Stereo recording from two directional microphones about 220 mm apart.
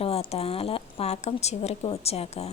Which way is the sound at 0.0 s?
25° left (ahead or behind).